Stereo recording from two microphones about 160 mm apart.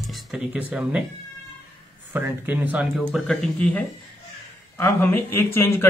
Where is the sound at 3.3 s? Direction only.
5° left (ahead or behind).